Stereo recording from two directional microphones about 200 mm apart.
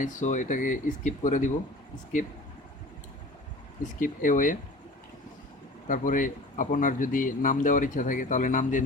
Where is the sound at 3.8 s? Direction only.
40° left (ahead or behind).